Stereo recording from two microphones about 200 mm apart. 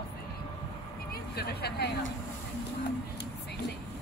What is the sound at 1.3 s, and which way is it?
Music, 55° left (ahead or behind).